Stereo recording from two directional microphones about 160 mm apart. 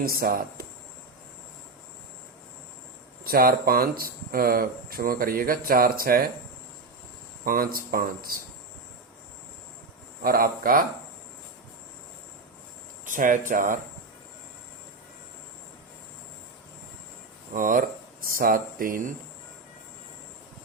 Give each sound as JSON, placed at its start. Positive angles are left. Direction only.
{"t": 0.1, "sound": "speech", "side_deg": -65}
{"t": 3.2, "sound": "speech", "side_deg": -70}
{"t": 7.4, "sound": "speech", "side_deg": -65}
{"t": 10.2, "sound": "speech", "side_deg": -65}
{"t": 13.1, "sound": "speech", "side_deg": -55}
{"t": 17.5, "sound": "speech", "side_deg": -60}